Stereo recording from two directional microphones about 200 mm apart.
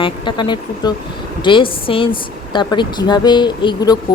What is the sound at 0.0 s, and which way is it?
Speech, 25° left (ahead or behind).